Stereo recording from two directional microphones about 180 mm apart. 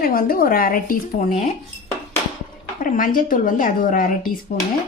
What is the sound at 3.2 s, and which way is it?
A woman's voice, 50° left (ahead or behind).